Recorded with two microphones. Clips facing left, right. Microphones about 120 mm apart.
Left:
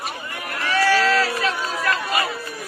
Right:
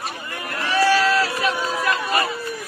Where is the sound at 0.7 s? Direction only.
20° right (ahead or behind).